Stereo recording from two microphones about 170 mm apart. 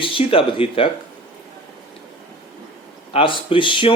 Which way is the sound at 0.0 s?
30° left (ahead or behind).